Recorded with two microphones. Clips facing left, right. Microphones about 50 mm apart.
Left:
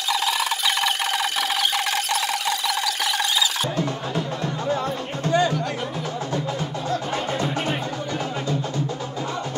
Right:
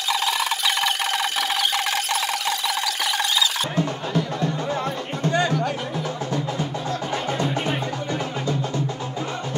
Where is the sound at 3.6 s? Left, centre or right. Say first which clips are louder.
Even; right.